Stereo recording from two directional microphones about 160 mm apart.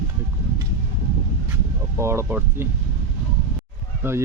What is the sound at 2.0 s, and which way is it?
Speech, 15° right (ahead or behind).